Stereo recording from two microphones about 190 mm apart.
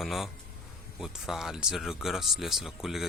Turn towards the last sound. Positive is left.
turn(degrees=0)  # may be behind; listen again after turning